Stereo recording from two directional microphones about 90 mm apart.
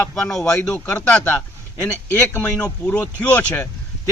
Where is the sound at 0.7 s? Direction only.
25° left (ahead or behind).